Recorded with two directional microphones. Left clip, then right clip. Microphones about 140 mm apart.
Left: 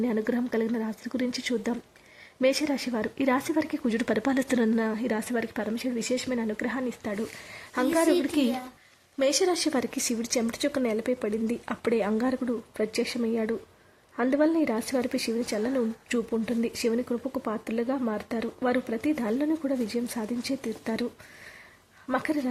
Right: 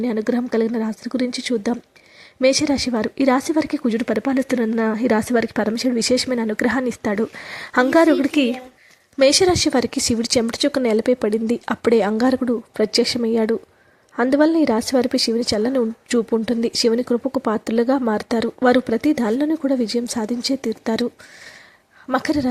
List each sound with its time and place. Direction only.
0.0 s a woman's voice: 30° right (ahead or behind); by 7.9 s 50° right (ahead or behind)
8.0 s a woman's voice: 35° right (ahead or behind)
9.1 s a woman's voice: 45° right (ahead or behind)
22.1 s a woman's voice: 35° right (ahead or behind)